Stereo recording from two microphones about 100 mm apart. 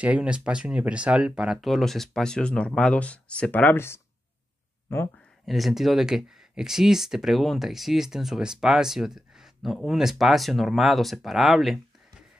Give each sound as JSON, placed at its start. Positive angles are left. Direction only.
{"t": 0.0, "sound": "speech", "side_deg": -10}
{"t": 5.4, "sound": "speech", "side_deg": 0}